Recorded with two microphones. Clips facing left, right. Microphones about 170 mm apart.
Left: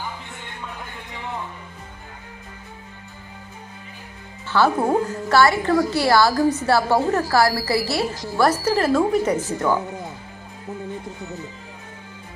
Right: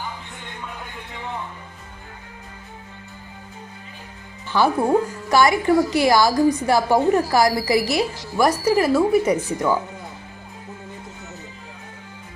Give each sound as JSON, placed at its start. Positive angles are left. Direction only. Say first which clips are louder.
{"t": 4.5, "sound": "a woman's voice", "louder": "right 1 dB", "side_deg": -15}